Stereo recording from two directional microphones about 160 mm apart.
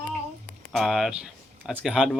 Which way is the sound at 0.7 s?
Centre (ahead or behind).